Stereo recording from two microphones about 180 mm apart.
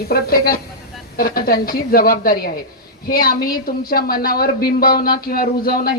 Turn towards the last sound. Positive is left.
turn(degrees=55)  # may be behind; listen again after turning